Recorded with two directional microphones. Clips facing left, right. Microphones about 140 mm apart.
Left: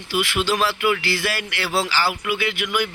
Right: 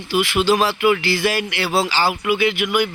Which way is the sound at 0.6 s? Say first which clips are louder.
Right 4 dB; 20° right (ahead or behind).